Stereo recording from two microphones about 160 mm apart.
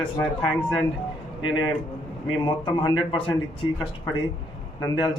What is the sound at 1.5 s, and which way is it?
Speech, 30° left (ahead or behind).